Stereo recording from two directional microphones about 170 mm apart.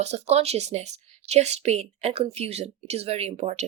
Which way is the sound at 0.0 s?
40° right (ahead or behind).